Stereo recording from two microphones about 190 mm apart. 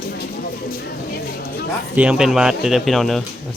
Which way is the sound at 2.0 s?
5° right (ahead or behind).